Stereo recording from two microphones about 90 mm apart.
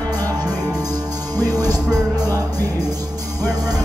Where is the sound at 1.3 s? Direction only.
45° right (ahead or behind).